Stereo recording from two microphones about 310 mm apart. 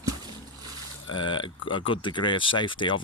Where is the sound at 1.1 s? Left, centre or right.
Centre.